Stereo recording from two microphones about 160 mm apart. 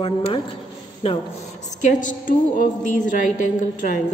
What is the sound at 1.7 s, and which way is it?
A woman's voice, 50° left (ahead or behind).